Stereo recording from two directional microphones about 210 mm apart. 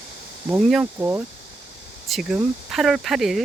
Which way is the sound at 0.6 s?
Centre (ahead or behind).